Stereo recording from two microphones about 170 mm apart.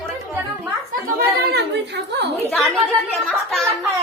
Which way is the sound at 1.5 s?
85° right.